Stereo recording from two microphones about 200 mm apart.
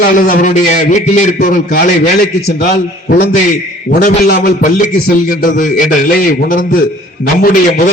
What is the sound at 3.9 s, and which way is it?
A man's voice, 40° left (ahead or behind).